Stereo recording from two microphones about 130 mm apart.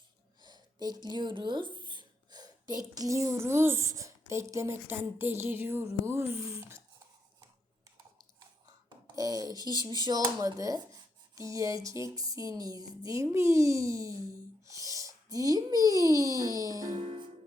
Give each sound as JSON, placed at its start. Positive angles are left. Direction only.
{"t": 0.4, "sound": "speech", "side_deg": -30}
{"t": 9.1, "sound": "speech", "side_deg": -30}
{"t": 11.3, "sound": "a sound", "side_deg": -25}
{"t": 14.7, "sound": "a child's voice", "side_deg": -25}